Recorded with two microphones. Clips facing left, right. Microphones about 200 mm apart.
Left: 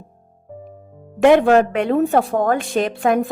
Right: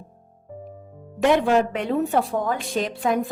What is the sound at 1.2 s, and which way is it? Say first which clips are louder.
Speech: left 6 dB; 60° left (ahead or behind).